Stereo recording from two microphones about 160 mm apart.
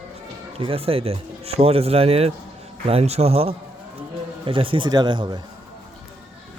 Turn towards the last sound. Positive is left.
turn(degrees=-30)  # may be behind; listen again after turning